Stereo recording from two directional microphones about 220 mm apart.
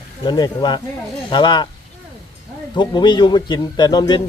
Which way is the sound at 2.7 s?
20° left (ahead or behind).